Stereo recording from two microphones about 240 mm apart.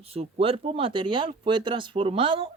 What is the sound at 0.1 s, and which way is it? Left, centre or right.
Speech, right.